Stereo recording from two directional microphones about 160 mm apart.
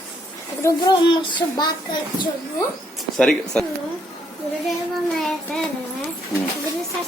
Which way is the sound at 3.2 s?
5° left (ahead or behind).